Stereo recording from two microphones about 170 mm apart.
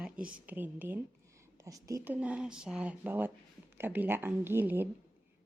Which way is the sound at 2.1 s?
5° right (ahead or behind).